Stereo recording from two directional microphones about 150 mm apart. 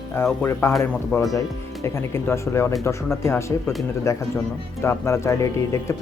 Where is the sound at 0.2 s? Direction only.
15° left (ahead or behind).